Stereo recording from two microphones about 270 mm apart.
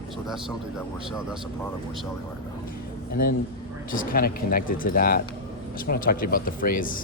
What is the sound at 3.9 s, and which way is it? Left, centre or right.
Speech, left.